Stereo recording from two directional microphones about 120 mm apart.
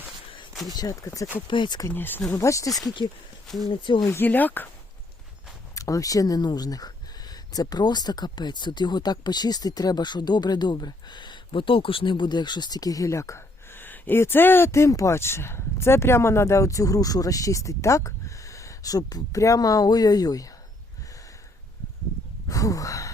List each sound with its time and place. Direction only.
0.7 s speech: 30° left (ahead or behind)
1.5 s speech: 40° left (ahead or behind)
1.9 s speech: 15° left (ahead or behind); by 3.1 s 35° left (ahead or behind)
3.4 s speech: centre (ahead or behind)
4.0 s speech: 20° left (ahead or behind)
5.7 s speech: 30° left (ahead or behind)
22.4 s sigh: 30° left (ahead or behind)